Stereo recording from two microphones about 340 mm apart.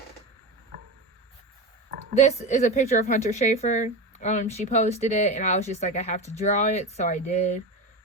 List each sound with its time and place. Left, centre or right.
2.1 s a woman's voice: centre